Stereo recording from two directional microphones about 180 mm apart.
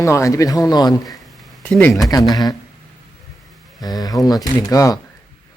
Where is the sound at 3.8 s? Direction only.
20° left (ahead or behind).